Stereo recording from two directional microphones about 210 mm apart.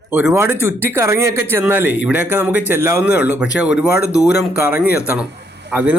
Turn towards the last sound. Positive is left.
turn(degrees=-10)  # may be behind; listen again after turning